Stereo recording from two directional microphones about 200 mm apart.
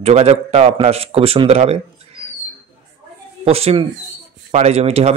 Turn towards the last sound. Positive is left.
turn(degrees=-30)  # may be behind; listen again after turning